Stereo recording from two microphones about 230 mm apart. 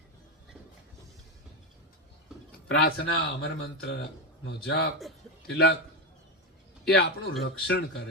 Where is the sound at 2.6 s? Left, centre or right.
Left.